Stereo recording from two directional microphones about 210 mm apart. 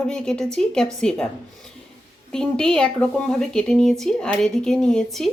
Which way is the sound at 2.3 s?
5° left (ahead or behind).